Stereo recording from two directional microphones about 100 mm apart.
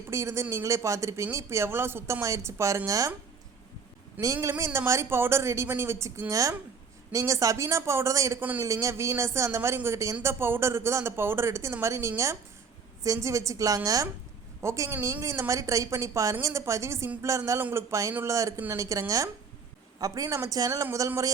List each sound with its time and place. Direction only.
0.1 s speech: 30° right (ahead or behind)
4.2 s speech: 30° right (ahead or behind)
8.4 s a man's voice: 15° right (ahead or behind)
8.6 s speech: 35° right (ahead or behind)
17.6 s speech: 20° right (ahead or behind)
18.3 s speech: 30° right (ahead or behind)